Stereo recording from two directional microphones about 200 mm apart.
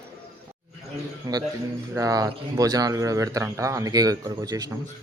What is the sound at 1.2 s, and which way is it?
Speech, 20° right (ahead or behind).